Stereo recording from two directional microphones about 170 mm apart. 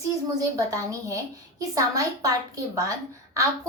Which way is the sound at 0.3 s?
20° right (ahead or behind).